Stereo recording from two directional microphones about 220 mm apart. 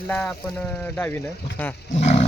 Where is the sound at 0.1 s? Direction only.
5° left (ahead or behind).